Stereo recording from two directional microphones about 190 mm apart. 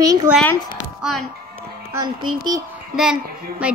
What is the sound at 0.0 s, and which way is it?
Speech, 20° right (ahead or behind).